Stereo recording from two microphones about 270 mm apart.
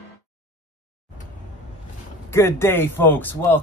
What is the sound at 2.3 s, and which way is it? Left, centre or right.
Speech, centre.